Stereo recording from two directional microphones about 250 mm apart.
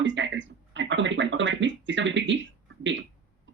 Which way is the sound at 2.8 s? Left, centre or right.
Right.